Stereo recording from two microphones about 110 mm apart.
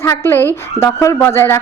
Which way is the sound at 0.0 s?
25° left (ahead or behind).